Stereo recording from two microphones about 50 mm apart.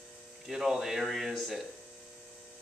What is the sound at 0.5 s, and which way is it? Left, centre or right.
Speech, centre.